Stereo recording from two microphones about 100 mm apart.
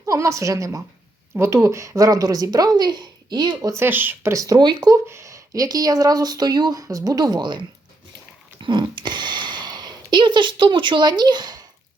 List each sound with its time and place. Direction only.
0.0 s a woman's voice: 30° right (ahead or behind); by 3.7 s 45° right (ahead or behind)
3.7 s speech: 20° right (ahead or behind); by 4.9 s 45° right (ahead or behind)
5.0 s speech: 30° right (ahead or behind); by 7.6 s 45° right (ahead or behind)
8.6 s speech: 50° right (ahead or behind)